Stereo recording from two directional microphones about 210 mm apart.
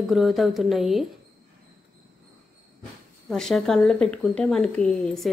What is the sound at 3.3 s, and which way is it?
A woman's voice, centre (ahead or behind).